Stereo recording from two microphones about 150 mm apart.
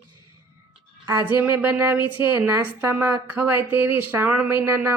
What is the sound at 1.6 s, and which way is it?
A woman's voice, 15° right (ahead or behind).